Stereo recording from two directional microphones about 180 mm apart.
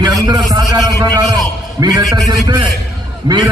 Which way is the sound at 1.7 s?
20° right (ahead or behind).